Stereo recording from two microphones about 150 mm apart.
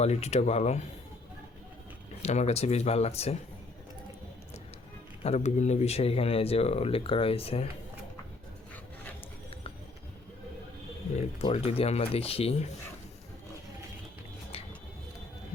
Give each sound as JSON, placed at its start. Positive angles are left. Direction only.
{"t": 0.0, "sound": "speech", "side_deg": 45}
{"t": 2.2, "sound": "speech", "side_deg": 45}
{"t": 5.2, "sound": "speech", "side_deg": 45}
{"t": 11.4, "sound": "speech", "side_deg": 40}